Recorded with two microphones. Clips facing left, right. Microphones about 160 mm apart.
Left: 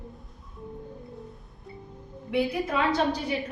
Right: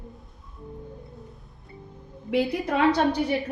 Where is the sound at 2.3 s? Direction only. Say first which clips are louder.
Right 2 dB; 75° right (ahead or behind).